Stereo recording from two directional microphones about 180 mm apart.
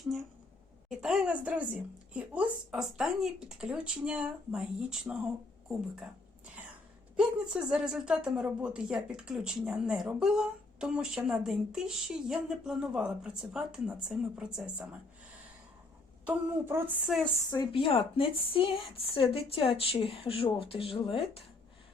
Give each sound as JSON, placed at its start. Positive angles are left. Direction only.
{"t": 0.9, "sound": "a sound", "side_deg": -5}
{"t": 2.1, "sound": "speech", "side_deg": -5}
{"t": 16.2, "sound": "a woman's voice", "side_deg": -10}
{"t": 17.5, "sound": "a woman's voice", "side_deg": 30}